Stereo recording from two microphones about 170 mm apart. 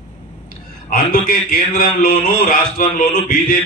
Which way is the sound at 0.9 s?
55° left (ahead or behind).